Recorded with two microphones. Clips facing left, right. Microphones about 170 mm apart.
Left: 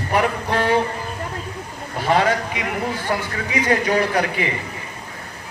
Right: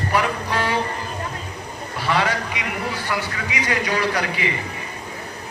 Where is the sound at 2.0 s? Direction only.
45° left (ahead or behind); by 3.9 s 30° left (ahead or behind).